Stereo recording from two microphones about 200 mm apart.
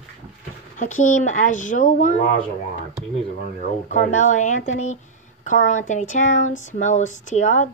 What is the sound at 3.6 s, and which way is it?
Speech, 40° left (ahead or behind).